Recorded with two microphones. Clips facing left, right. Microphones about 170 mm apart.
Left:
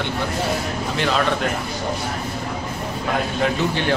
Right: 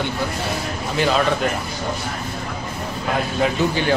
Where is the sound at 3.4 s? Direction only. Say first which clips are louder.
Right 3 dB; 5° right (ahead or behind).